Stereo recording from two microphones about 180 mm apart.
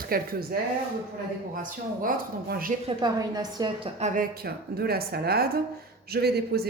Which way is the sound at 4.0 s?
45° right (ahead or behind).